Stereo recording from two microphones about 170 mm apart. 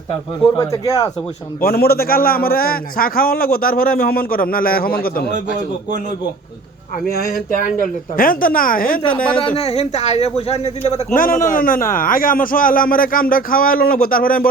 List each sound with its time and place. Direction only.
0.5 s speech: 20° left (ahead or behind)
1.6 s a man's voice: 65° left (ahead or behind)
7.1 s a man's voice: 65° left (ahead or behind)
9.1 s speech: 5° left (ahead or behind)
9.6 s a man's voice: 40° left (ahead or behind); by 14.5 s 55° left (ahead or behind)